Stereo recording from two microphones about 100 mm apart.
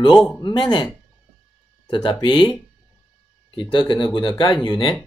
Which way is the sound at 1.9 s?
50° left (ahead or behind).